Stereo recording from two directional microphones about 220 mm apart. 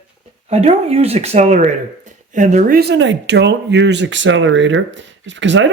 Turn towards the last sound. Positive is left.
turn(degrees=-55)  # may be behind; listen again after turning